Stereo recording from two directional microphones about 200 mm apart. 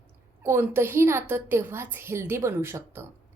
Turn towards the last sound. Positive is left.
turn(degrees=-10)  # may be behind; listen again after turning